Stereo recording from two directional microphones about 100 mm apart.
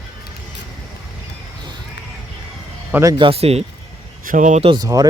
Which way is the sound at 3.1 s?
65° right (ahead or behind).